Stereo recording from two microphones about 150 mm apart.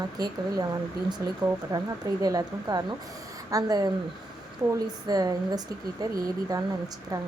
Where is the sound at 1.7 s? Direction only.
25° right (ahead or behind).